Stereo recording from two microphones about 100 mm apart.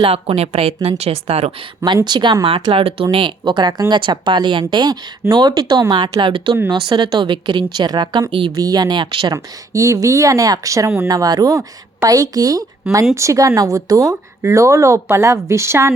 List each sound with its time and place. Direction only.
0.0 s speech: 70° right (ahead or behind)
2.0 s speech: 50° right (ahead or behind)
2.7 s speech: 70° right (ahead or behind); by 8.2 s 45° right (ahead or behind)
8.3 s speech: 60° right (ahead or behind)
8.5 s speech: 40° right (ahead or behind)
9.7 s speech: 35° right (ahead or behind)
11.1 s speech: 40° right (ahead or behind)